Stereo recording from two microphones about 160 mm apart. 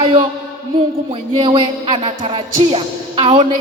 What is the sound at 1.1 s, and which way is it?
Music, 30° right (ahead or behind).